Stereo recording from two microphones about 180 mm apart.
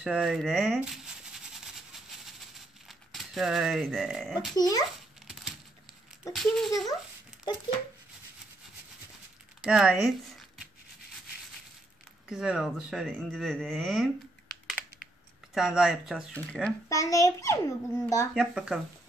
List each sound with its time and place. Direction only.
0.0 s speech: 5° right (ahead or behind)
2.9 s speech: centre (ahead or behind)
4.6 s a child's voice: 20° left (ahead or behind)
5.2 s a sound: centre (ahead or behind)
6.3 s speech: centre (ahead or behind)
9.6 s speech: 5° right (ahead or behind)
12.3 s speech: 5° right (ahead or behind)
15.5 s speech: 5° right (ahead or behind)
16.9 s a child's voice: 20° left (ahead or behind)
18.3 s speech: centre (ahead or behind)